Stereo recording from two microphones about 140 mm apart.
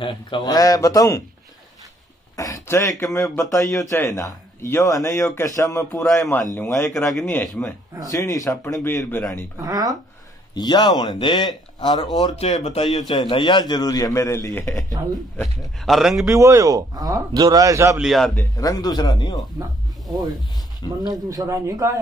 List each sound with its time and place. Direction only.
0.0 s speech: 40° left (ahead or behind)
0.6 s speech: 25° left (ahead or behind)
2.3 s speech: 20° left (ahead or behind)
8.1 s speech: 25° left (ahead or behind)
9.6 s a man's voice: 25° right (ahead or behind)
10.5 s speech: 30° left (ahead or behind)
12.4 s speech: 50° left (ahead or behind)
13.1 s speech: 35° left (ahead or behind); by 14.8 s 15° left (ahead or behind)
15.0 s a man's voice: 25° right (ahead or behind)
15.4 s speech: centre (ahead or behind)
16.3 s a man's voice: 20° right (ahead or behind)
17.9 s speech: centre (ahead or behind)
18.4 s speech: 25° left (ahead or behind)
21.0 s a man's voice: 30° right (ahead or behind)